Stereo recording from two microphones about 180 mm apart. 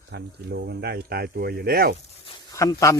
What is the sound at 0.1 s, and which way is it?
Speech, 65° right (ahead or behind).